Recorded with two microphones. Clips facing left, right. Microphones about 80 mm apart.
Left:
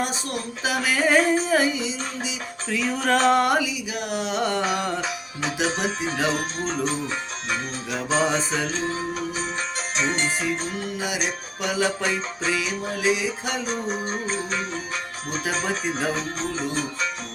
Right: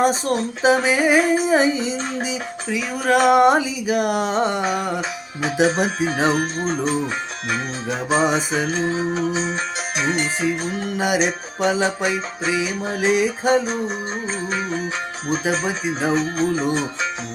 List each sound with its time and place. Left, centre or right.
0.0 s speech: right
1.8 s music: right
2.6 s music: centre
3.8 s music: right
4.4 s speech: right
4.6 s music: centre
5.6 s music: right
7.9 s music: right
10.0 s music: centre
11.0 s music: right
11.6 s speech: right
12.0 s music: centre
13.1 s music: right
15.5 s music: centre